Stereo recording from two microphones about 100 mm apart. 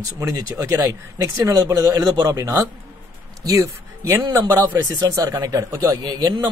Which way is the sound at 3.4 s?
30° right (ahead or behind).